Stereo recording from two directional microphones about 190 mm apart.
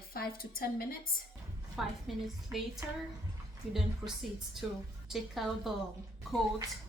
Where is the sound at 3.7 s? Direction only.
Centre (ahead or behind).